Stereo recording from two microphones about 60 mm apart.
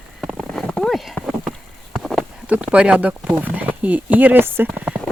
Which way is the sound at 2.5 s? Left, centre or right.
Centre.